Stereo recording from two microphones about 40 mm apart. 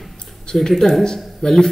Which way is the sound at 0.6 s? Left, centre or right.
Centre.